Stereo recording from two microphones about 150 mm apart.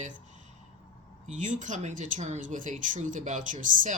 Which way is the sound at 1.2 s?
55° right (ahead or behind).